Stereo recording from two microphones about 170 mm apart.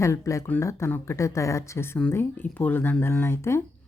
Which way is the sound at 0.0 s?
15° left (ahead or behind).